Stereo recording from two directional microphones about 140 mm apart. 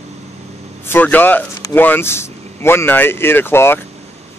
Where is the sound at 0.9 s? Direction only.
10° left (ahead or behind).